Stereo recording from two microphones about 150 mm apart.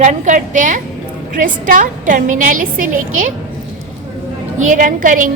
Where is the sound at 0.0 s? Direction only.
55° right (ahead or behind).